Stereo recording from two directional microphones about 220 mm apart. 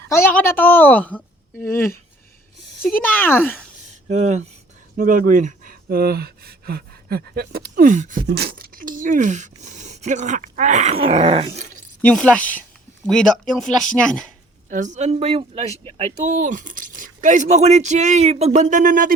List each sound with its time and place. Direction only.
0.1 s a woman's voice: 10° left (ahead or behind)
4.1 s speech: 30° right (ahead or behind)
8.3 s speech: 45° right (ahead or behind); by 11.8 s 30° right (ahead or behind)
12.0 s speech: 5° left (ahead or behind)
14.7 s speech: 35° right (ahead or behind)